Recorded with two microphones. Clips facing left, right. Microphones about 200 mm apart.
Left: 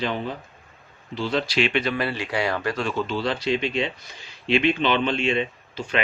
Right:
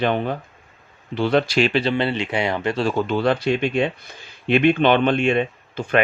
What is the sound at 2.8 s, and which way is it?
Speech, 50° right (ahead or behind).